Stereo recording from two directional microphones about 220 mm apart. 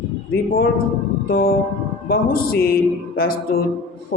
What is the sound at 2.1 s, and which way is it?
Speech, 45° left (ahead or behind).